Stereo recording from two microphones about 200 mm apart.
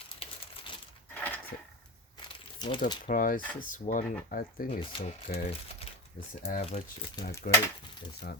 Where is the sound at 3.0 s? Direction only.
45° left (ahead or behind).